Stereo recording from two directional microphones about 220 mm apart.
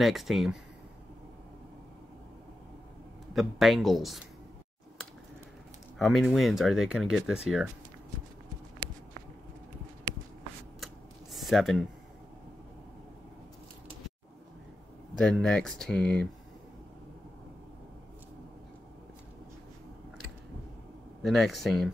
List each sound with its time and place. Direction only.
0.0 s speech: centre (ahead or behind)
3.3 s speech: centre (ahead or behind)
5.9 s speech: centre (ahead or behind)
8.8 s walk: 25° right (ahead or behind)
11.3 s speech: centre (ahead or behind)
15.1 s speech: 5° left (ahead or behind)
21.2 s speech: centre (ahead or behind)